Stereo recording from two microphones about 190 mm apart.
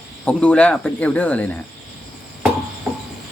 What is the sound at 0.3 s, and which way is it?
Speech, 5° left (ahead or behind).